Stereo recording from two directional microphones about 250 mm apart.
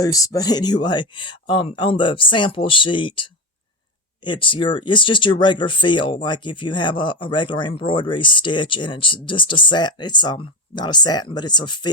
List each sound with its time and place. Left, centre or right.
0.0 s speech: centre